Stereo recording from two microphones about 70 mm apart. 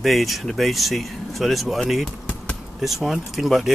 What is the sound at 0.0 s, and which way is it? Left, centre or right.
Speech, centre.